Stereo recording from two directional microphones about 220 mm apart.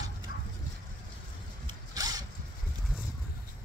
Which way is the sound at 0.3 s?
45° left (ahead or behind).